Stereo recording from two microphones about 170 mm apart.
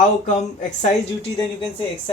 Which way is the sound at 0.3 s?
40° left (ahead or behind).